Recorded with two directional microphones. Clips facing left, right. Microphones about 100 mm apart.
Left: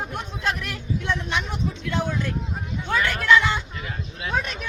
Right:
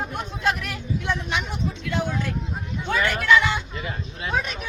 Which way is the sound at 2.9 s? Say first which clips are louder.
Even; centre (ahead or behind).